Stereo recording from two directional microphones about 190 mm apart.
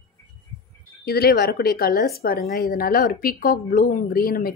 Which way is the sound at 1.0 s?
55° left (ahead or behind).